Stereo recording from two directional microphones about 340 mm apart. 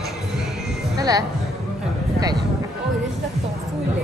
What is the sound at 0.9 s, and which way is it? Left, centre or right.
Music, centre.